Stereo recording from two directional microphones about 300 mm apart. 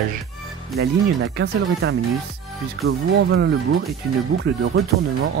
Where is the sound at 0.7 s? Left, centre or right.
Right.